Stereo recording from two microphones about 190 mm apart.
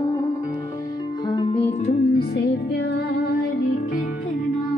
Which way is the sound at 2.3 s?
60° left (ahead or behind).